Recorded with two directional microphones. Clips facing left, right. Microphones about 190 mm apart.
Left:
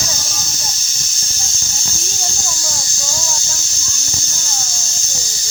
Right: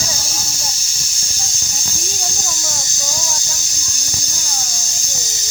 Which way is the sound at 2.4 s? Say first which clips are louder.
Even; 20° right (ahead or behind).